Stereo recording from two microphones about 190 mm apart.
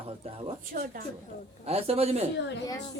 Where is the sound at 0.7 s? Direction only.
50° right (ahead or behind).